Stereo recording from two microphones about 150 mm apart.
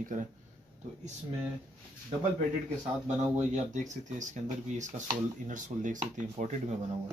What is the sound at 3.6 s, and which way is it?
Speech, 55° right (ahead or behind).